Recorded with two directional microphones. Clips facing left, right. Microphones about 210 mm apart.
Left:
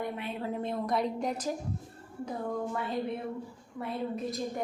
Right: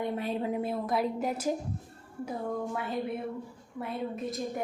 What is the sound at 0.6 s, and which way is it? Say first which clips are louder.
Speech: right 1 dB; 5° right (ahead or behind).